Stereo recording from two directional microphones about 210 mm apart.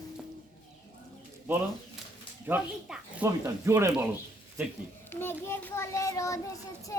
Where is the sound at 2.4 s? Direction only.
5° right (ahead or behind).